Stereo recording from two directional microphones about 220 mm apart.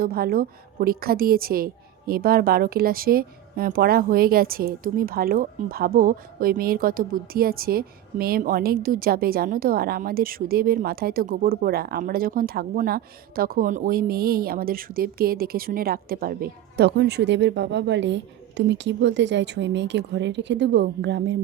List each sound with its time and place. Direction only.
0.0 s a woman's voice: 40° right (ahead or behind)